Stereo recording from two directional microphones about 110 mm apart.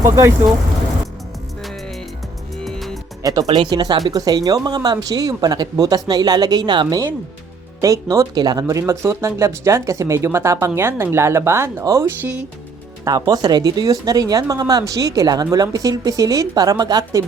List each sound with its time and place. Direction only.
0.0 s speech: 25° right (ahead or behind)
2.6 s music: centre (ahead or behind)
3.5 s speech: 45° right (ahead or behind)
7.8 s speech: 30° right (ahead or behind)
13.1 s speech: 35° right (ahead or behind)